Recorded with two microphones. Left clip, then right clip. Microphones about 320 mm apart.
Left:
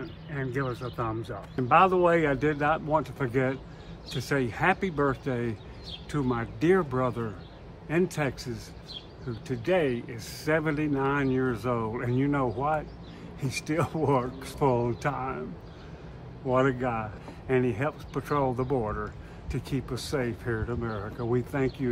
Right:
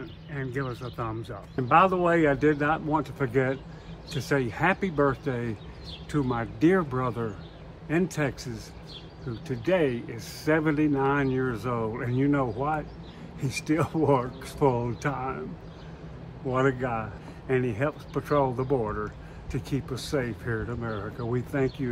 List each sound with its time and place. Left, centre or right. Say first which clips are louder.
0.0 s speech: left 1 dB; centre
16.4 s speech: left 1 dB; centre